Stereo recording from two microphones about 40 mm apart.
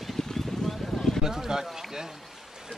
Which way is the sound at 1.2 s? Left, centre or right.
Centre.